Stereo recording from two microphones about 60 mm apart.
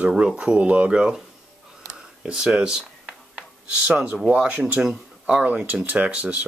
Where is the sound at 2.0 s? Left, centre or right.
Centre.